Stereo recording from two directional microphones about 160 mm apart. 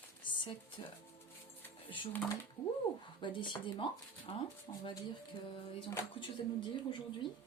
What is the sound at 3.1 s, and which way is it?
A woman's voice, 30° left (ahead or behind).